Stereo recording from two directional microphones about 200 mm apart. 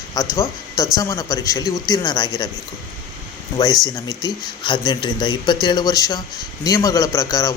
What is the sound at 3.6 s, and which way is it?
Speech, 20° left (ahead or behind).